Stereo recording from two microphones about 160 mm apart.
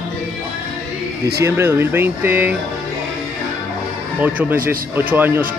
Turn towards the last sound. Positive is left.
turn(degrees=-10)  # may be behind; listen again after turning